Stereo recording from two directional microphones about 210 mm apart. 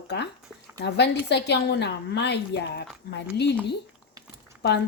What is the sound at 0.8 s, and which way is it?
A woman's voice, 55° left (ahead or behind).